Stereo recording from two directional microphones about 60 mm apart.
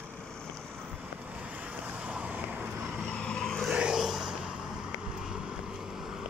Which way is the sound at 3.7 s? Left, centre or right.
Centre.